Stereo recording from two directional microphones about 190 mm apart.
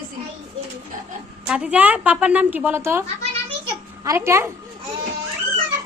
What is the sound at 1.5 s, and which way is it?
A woman's voice, 5° right (ahead or behind).